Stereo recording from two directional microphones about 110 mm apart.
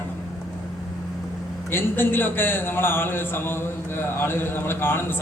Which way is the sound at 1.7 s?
20° left (ahead or behind).